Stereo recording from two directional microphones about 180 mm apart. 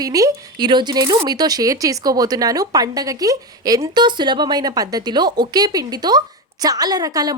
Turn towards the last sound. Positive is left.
turn(degrees=-20)  # may be behind; listen again after turning